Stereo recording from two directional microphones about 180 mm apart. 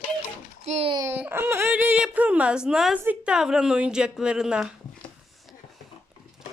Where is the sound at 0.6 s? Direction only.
35° right (ahead or behind).